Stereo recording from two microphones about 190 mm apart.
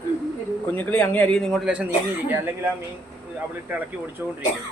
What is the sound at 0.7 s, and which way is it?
A man's voice, 10° left (ahead or behind).